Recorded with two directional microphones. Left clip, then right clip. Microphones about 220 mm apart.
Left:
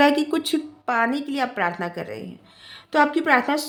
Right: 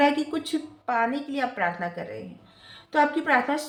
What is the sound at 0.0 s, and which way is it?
A woman's voice, 55° left (ahead or behind).